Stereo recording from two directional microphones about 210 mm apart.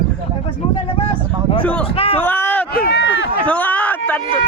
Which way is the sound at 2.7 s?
50° left (ahead or behind).